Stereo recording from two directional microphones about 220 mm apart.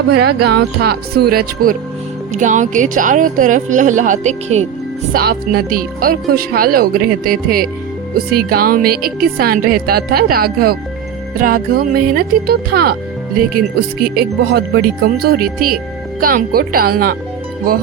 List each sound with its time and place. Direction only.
0.1 s a woman's voice: 50° right (ahead or behind); by 4.6 s 30° right (ahead or behind)
5.1 s a woman's voice: 45° right (ahead or behind)
14.0 s a woman's voice: 45° right (ahead or behind)